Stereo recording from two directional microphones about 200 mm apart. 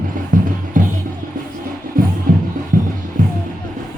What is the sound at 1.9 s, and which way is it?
Music, 45° right (ahead or behind).